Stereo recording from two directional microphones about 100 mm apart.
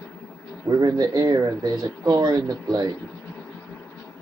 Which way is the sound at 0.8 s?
40° right (ahead or behind).